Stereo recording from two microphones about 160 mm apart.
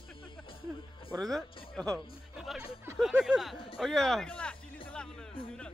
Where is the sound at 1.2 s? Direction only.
Centre (ahead or behind).